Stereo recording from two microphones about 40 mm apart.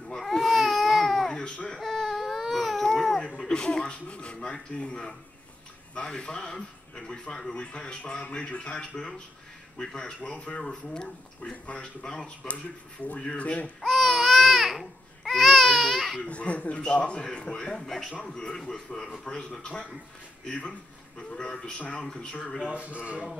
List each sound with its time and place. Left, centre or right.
0.3 s baby cry: centre
3.2 s a sound: left
3.9 s a man's voice: left
11.5 s a child's voice: left
11.8 s a man's voice: left
13.2 s a child's voice: left
13.7 s babbling: centre
16.3 s a child's voice: left
17.8 s a man's voice: centre
18.3 s a man's voice: centre
22.0 s a man's voice: centre
22.6 s speech: right